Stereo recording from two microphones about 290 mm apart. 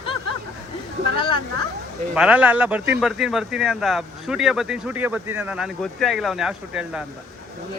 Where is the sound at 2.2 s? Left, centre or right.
Centre.